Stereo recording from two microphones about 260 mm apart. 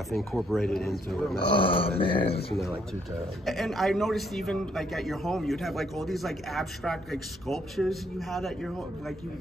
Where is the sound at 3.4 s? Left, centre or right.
Centre.